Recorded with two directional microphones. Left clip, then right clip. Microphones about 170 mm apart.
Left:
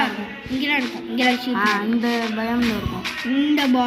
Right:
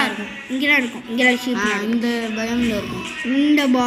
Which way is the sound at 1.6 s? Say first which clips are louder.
Left 3 dB; 40° left (ahead or behind).